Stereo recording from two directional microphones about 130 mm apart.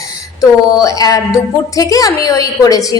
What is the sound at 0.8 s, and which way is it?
A woman's voice, 25° left (ahead or behind).